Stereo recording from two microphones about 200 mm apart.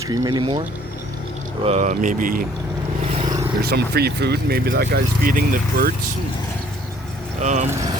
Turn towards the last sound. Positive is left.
turn(degrees=-15)  # may be behind; listen again after turning